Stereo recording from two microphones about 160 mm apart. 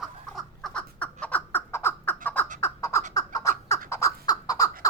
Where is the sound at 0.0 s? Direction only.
Centre (ahead or behind); by 3.8 s 20° left (ahead or behind).